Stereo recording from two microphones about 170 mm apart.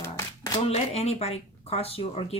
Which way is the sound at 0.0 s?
20° left (ahead or behind).